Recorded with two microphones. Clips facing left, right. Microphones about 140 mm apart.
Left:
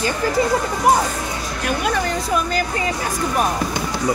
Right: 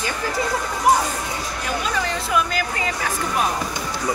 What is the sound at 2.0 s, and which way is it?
Speech, 40° left (ahead or behind).